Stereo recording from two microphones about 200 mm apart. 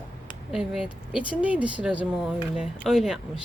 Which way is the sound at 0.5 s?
5° right (ahead or behind).